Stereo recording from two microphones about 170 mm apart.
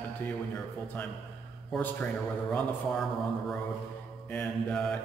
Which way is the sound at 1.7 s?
10° left (ahead or behind).